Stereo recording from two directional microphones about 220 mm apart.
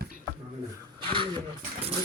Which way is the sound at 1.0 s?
25° right (ahead or behind).